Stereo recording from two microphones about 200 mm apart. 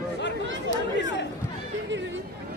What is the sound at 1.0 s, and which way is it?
Chatter, 60° left (ahead or behind).